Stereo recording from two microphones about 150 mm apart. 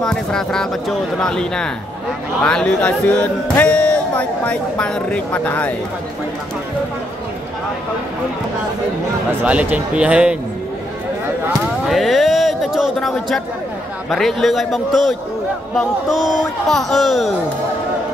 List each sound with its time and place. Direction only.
0.0 s speech: 5° left (ahead or behind)
9.4 s speech: 10° right (ahead or behind)
11.9 s a sound: centre (ahead or behind)
14.1 s speech: centre (ahead or behind)